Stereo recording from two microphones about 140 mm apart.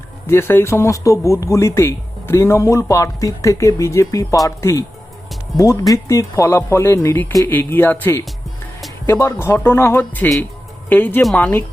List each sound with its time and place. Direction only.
0.3 s speech: 15° left (ahead or behind)